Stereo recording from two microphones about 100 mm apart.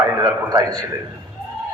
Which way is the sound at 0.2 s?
40° right (ahead or behind).